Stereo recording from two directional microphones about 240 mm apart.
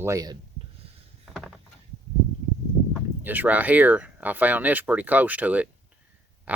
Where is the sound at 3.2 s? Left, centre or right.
Centre.